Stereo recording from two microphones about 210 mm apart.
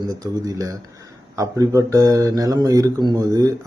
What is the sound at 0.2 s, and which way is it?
Speech, 15° right (ahead or behind).